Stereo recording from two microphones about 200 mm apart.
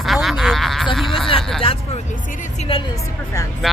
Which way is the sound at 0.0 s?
Centre (ahead or behind).